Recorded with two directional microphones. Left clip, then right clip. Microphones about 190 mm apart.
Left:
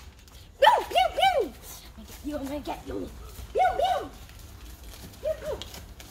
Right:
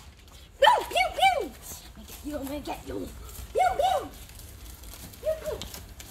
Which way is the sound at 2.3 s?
10° left (ahead or behind).